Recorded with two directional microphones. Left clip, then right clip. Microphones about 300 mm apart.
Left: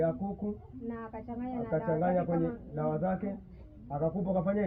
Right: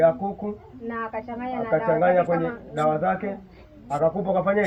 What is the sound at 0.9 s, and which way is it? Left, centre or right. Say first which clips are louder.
A woman's voice: right 11 dB; centre.